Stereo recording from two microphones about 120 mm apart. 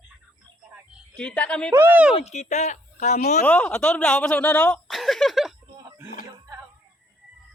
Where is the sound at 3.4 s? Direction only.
10° left (ahead or behind).